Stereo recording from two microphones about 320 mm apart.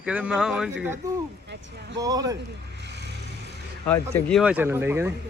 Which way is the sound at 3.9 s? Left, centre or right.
Centre.